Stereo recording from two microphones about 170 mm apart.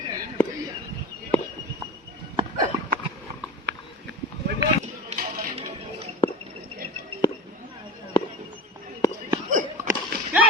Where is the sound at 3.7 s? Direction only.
90° right.